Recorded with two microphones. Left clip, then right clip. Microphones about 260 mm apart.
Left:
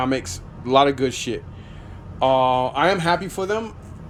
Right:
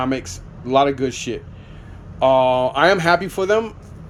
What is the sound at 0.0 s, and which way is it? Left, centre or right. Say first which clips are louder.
Speech: even; centre.